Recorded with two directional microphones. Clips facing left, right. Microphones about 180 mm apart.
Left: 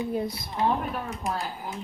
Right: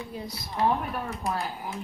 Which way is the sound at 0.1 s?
55° left (ahead or behind).